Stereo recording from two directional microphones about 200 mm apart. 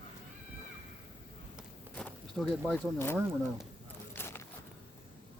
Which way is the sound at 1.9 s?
5° left (ahead or behind).